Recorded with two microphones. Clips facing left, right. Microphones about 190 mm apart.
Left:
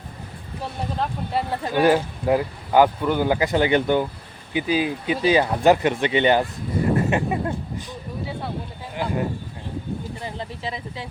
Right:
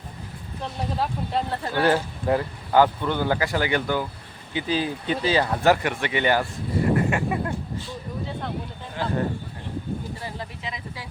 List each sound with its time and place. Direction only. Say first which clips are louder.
0.9 s speech: left 1 dB; 5° left (ahead or behind)
10.2 s speech: left 3 dB; 30° left (ahead or behind)